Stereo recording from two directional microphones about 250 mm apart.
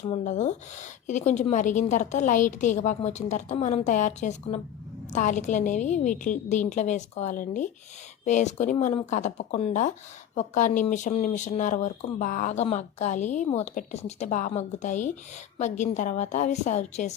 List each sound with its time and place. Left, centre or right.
0.1 s speech: left